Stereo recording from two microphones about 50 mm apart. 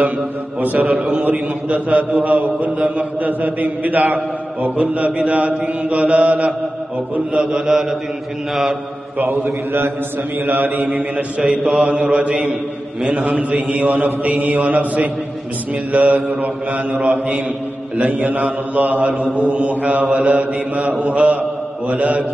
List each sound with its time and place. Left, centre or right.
0.6 s mantra: right
0.8 s mantra: centre
1.2 s mantra: right
7.3 s mantra: centre
9.2 s a man's voice: right
10.4 s mantra: right
10.9 s mantra: right
11.4 s mantra: centre; by 22.2 s right